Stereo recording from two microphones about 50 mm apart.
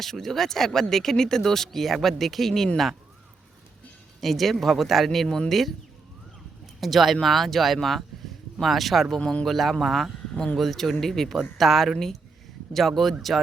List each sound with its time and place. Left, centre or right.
0.0 s speech: centre
4.2 s speech: centre
6.7 s speech: centre
9.2 s speech: centre
9.5 s speech: centre
10.3 s speech: centre
10.6 s speech: centre